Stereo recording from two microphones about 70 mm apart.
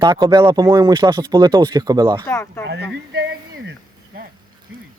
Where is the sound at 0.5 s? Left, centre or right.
Right.